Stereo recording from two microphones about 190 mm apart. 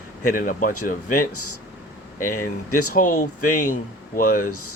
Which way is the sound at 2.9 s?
45° left (ahead or behind).